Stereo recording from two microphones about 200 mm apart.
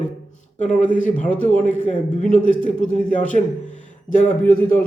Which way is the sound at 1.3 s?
5° left (ahead or behind).